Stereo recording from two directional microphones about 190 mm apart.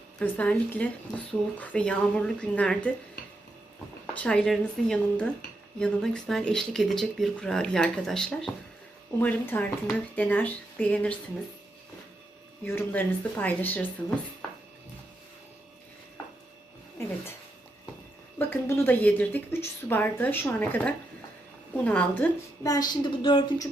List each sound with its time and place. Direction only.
0.2 s speech: 5° left (ahead or behind)
4.0 s speech: 5° left (ahead or behind)
12.6 s speech: 10° left (ahead or behind)
18.3 s speech: 10° left (ahead or behind)
22.6 s a woman's voice: 20° left (ahead or behind)